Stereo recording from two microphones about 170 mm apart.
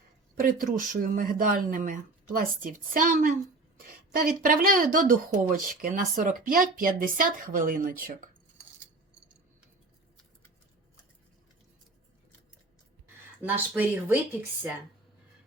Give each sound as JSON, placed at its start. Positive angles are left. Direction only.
{"t": 0.3, "sound": "speech", "side_deg": -55}
{"t": 13.4, "sound": "speech", "side_deg": -10}